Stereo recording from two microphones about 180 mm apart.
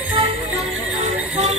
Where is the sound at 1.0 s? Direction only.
40° right (ahead or behind).